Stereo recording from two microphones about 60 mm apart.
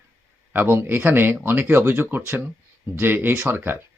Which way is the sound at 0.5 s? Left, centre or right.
Right.